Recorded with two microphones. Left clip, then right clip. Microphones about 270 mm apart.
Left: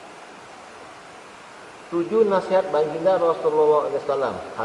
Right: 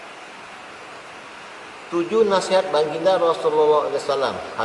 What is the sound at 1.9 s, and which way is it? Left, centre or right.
Speech, left.